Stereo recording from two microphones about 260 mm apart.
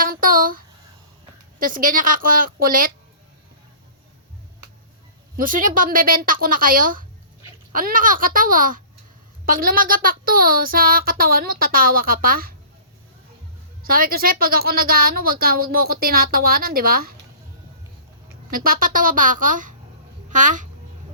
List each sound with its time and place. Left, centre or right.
0.0 s a sound: right
1.5 s a woman's voice: right
5.4 s a woman's voice: right
13.8 s a woman's voice: right
18.5 s a woman's voice: right